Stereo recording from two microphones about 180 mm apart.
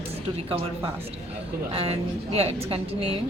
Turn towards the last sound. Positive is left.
turn(degrees=-35)  # may be behind; listen again after turning